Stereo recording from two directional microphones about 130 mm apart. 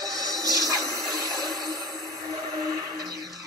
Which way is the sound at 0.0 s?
30° right (ahead or behind).